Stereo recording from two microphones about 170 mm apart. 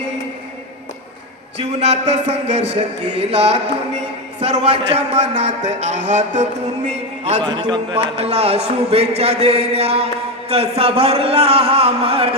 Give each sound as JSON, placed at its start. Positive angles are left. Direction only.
{"t": 1.5, "sound": "a man's voice", "side_deg": -40}